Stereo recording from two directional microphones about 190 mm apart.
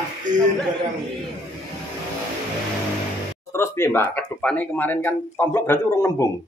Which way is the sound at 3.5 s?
15° left (ahead or behind).